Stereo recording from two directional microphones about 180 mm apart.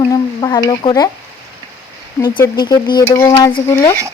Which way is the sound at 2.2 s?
20° left (ahead or behind).